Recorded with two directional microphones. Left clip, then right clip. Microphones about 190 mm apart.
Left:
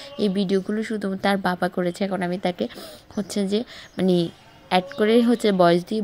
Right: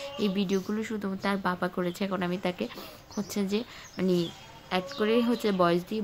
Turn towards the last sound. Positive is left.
turn(degrees=25)  # may be behind; listen again after turning